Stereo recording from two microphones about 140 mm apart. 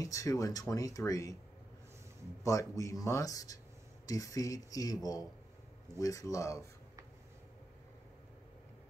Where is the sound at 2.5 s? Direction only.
20° left (ahead or behind).